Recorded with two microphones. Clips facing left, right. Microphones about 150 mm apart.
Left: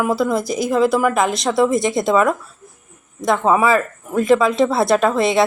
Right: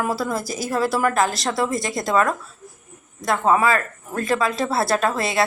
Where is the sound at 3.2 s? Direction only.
20° left (ahead or behind).